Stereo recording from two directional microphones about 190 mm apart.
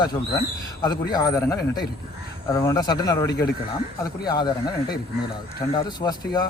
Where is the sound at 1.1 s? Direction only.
20° left (ahead or behind).